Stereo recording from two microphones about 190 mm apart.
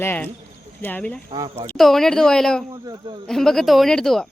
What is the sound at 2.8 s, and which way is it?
Speech, 20° right (ahead or behind).